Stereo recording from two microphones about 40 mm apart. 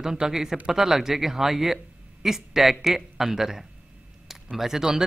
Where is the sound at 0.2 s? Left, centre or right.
Centre.